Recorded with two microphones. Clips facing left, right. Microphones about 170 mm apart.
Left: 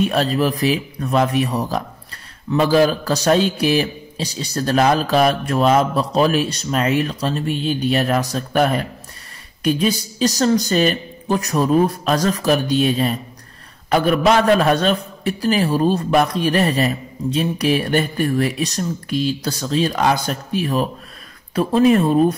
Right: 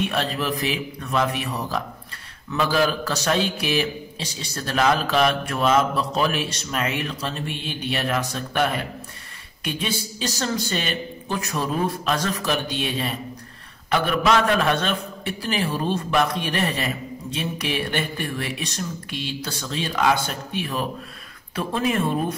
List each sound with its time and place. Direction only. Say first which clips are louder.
0.0 s a man's voice: left 7 dB; 40° left (ahead or behind)